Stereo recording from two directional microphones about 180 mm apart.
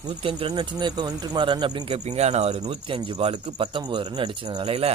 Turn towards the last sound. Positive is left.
turn(degrees=-35)  # may be behind; listen again after turning